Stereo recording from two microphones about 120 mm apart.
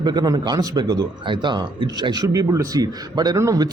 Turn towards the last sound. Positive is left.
turn(degrees=-30)  # may be behind; listen again after turning